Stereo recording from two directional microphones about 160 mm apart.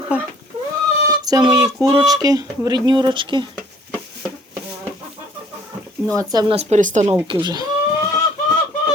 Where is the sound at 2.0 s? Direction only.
25° right (ahead or behind).